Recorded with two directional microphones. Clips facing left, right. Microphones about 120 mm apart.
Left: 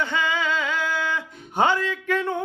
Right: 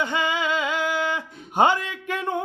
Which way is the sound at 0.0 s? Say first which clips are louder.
Even; 15° right (ahead or behind).